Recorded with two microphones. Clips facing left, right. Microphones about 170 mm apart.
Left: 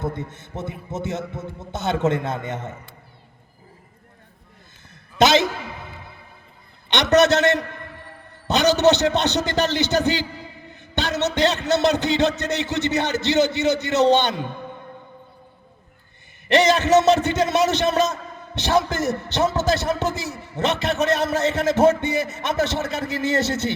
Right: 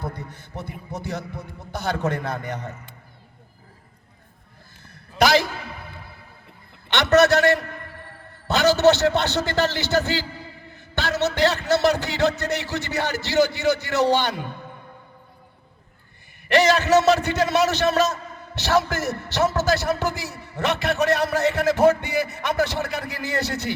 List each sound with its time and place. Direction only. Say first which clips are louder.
0.0 s a man's voice: left 5 dB; 25° left (ahead or behind)
5.1 s a sound: left 2 dB; 20° left (ahead or behind)
6.9 s a man's voice: even; 20° left (ahead or behind)
16.5 s a man's voice: left 1 dB; 20° left (ahead or behind)